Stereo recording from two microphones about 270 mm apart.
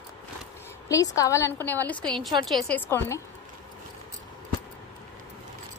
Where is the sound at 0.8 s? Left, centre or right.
Centre.